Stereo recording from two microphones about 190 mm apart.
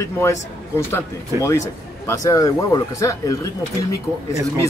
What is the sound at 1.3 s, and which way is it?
Speech, 15° right (ahead or behind).